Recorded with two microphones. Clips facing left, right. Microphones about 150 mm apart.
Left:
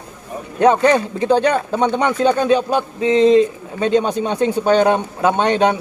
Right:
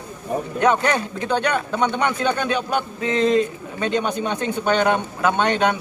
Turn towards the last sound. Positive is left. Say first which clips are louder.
# left 4 dB
turn(degrees=35)  # may be behind; listen again after turning